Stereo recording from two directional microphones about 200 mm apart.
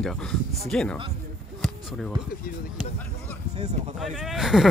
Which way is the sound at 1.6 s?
Centre (ahead or behind).